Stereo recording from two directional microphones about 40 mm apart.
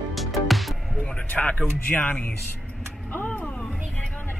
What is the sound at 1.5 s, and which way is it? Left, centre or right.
Speech, left.